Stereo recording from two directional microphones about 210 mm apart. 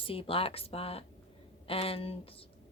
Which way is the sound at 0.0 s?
25° left (ahead or behind).